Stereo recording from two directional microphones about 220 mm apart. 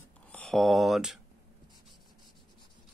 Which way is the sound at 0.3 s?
5° left (ahead or behind).